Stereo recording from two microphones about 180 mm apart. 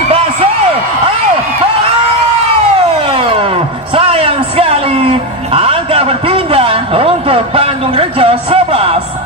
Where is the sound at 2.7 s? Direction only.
30° right (ahead or behind).